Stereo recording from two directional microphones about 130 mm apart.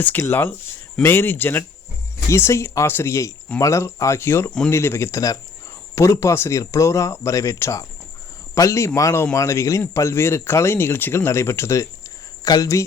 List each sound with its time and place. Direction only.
0.0 s speech: 15° left (ahead or behind)